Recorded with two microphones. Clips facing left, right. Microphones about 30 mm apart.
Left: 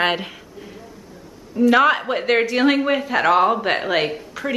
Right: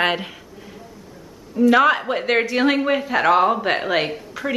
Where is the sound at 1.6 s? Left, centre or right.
Centre.